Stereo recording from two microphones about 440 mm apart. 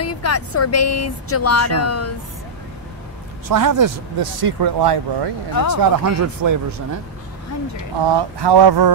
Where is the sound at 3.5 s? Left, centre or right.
Right.